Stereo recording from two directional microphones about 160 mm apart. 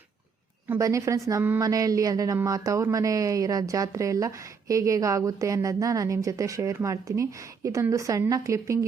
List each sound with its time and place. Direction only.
0.7 s a woman's voice: 20° right (ahead or behind)